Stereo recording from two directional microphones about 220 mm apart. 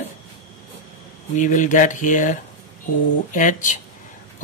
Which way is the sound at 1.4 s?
35° left (ahead or behind).